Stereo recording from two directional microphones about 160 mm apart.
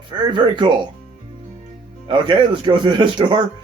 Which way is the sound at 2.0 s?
30° right (ahead or behind).